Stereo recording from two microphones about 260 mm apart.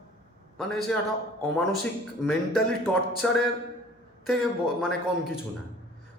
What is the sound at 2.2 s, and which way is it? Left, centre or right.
A man's voice, centre.